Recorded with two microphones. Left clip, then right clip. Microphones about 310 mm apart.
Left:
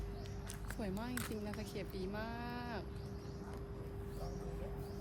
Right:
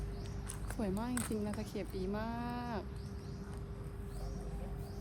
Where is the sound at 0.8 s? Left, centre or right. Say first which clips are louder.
Right 4 dB; centre.